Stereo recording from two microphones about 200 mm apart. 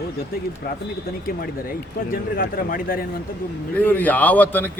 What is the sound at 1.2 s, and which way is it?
A man's voice, 45° left (ahead or behind).